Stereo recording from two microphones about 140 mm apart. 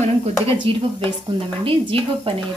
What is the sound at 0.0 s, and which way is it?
A woman's voice, 45° right (ahead or behind).